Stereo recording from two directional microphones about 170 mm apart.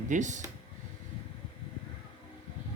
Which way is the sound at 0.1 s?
45° right (ahead or behind).